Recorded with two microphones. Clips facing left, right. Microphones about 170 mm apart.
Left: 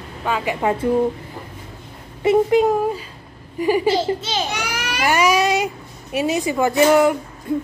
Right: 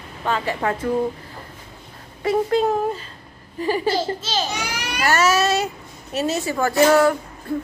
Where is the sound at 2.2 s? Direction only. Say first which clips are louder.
Left 4 dB; 15° left (ahead or behind).